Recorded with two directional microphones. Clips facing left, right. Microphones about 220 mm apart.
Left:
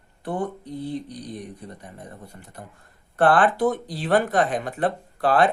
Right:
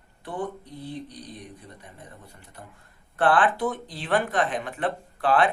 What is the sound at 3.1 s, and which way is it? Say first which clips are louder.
Speech: left 3 dB; 40° left (ahead or behind).